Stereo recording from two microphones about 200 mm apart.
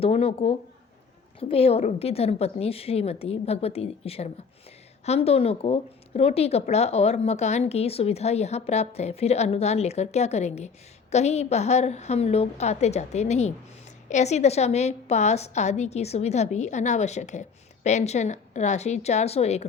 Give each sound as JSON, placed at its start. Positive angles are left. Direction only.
{"t": 0.0, "sound": "speech", "side_deg": 30}